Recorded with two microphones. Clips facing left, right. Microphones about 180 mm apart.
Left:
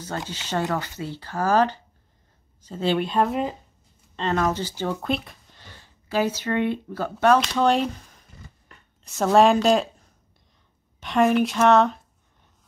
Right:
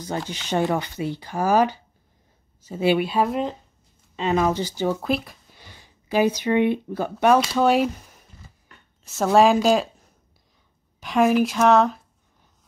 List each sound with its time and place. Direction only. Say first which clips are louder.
0.3 s speech: right 3 dB; 15° right (ahead or behind); by 3.5 s centre (ahead or behind)
4.2 s speech: right 2 dB; 10° right (ahead or behind)
5.0 s speech: right 2 dB; centre (ahead or behind)
5.6 s speech: even; 15° right (ahead or behind)
7.3 s speech: right 2 dB; 5° right (ahead or behind)
9.0 s speech: even; centre (ahead or behind)
11.0 s speech: right 1 dB; centre (ahead or behind)